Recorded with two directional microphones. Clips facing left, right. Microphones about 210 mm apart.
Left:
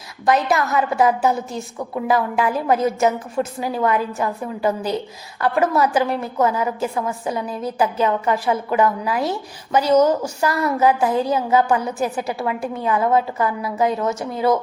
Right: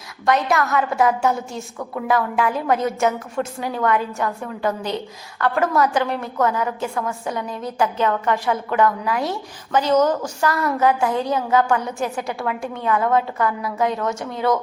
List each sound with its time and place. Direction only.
0.3 s a woman's voice: centre (ahead or behind)
7.3 s a woman's voice: 5° left (ahead or behind)